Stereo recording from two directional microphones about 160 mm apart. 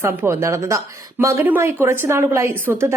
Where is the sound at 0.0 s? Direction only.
15° right (ahead or behind).